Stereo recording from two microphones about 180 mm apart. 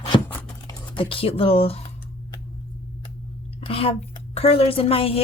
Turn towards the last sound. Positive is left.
turn(degrees=30)  # may be behind; listen again after turning